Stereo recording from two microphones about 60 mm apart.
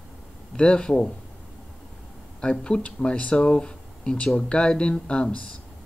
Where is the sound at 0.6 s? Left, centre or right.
Centre.